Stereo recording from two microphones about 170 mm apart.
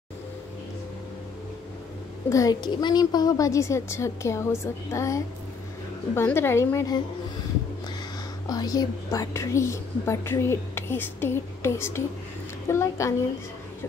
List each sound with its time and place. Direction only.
2.2 s a woman's voice: 20° left (ahead or behind)
8.5 s a woman's voice: 25° left (ahead or behind)